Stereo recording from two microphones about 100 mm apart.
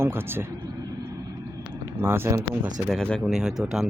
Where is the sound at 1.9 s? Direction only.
25° right (ahead or behind).